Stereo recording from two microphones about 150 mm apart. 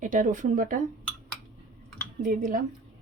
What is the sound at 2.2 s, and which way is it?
Speech, 65° right (ahead or behind).